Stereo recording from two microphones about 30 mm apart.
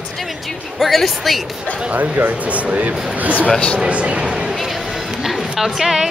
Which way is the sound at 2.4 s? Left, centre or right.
Right.